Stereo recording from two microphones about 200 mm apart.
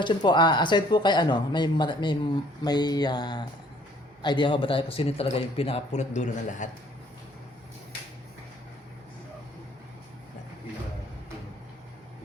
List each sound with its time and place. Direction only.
0.0 s a man's voice: 25° left (ahead or behind)